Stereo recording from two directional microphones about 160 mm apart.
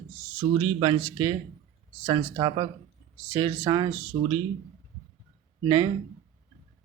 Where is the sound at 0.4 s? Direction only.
35° right (ahead or behind).